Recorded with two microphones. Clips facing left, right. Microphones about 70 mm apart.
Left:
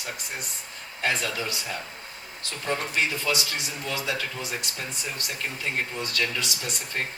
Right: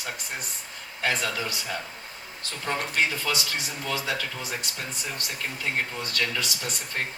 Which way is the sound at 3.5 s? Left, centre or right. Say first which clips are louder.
Right 1 dB; right.